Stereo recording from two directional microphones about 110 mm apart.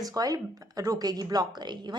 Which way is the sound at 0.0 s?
35° right (ahead or behind).